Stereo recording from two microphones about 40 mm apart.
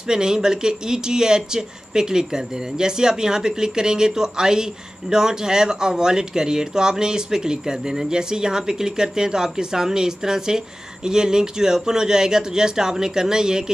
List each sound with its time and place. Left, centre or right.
0.0 s speech: centre